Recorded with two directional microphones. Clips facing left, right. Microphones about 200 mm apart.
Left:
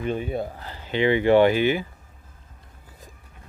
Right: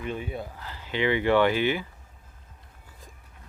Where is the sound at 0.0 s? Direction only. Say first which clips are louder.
Left 6 dB; 30° left (ahead or behind).